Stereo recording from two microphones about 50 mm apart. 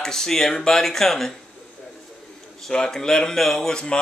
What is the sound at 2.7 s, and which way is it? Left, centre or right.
Speech, centre.